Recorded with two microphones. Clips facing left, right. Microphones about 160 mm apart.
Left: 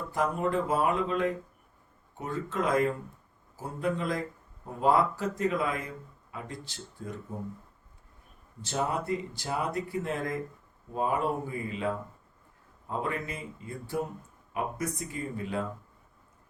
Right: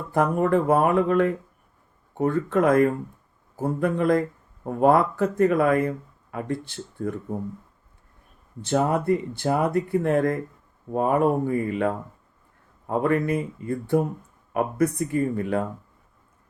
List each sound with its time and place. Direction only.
0.1 s speech: 55° right (ahead or behind)
8.6 s speech: 60° right (ahead or behind)